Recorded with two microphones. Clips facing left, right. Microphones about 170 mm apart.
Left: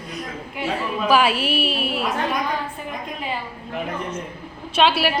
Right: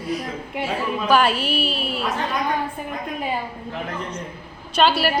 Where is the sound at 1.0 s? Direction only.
5° left (ahead or behind).